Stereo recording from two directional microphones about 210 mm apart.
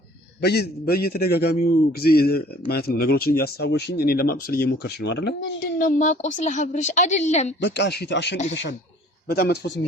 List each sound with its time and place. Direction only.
0.4 s speech: 50° left (ahead or behind)
5.8 s a woman's voice: 40° left (ahead or behind)
7.6 s speech: 55° left (ahead or behind)